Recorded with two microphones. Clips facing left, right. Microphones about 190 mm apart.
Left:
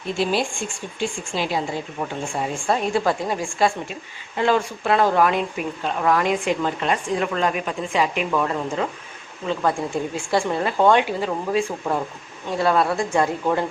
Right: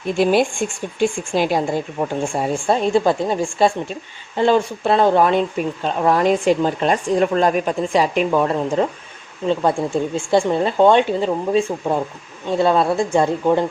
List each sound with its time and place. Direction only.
0.2 s speech: 55° right (ahead or behind)
2.6 s speech: 25° right (ahead or behind)
10.2 s speech: 25° right (ahead or behind)